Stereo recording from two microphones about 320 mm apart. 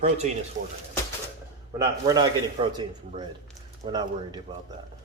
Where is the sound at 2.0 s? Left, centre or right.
Centre.